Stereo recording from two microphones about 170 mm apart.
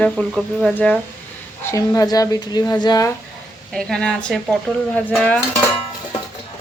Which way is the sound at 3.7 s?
5° left (ahead or behind).